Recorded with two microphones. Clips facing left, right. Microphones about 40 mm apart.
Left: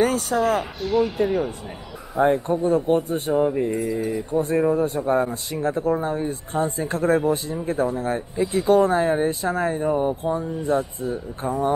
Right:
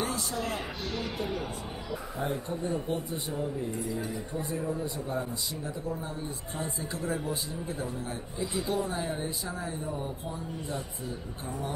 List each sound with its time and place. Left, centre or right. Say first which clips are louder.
0.0 s speech: left 12 dB; left
4.9 s speech: left 12 dB; left
10.7 s speech: left 17 dB; left